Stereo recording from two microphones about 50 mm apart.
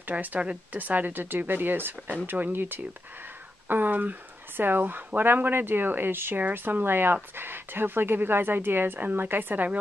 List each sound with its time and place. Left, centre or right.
0.1 s speech: right